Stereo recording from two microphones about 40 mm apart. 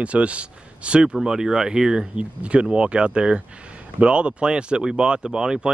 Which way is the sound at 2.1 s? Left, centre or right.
Right.